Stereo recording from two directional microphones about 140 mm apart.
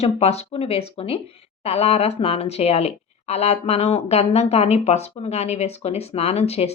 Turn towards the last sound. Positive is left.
turn(degrees=50)  # may be behind; listen again after turning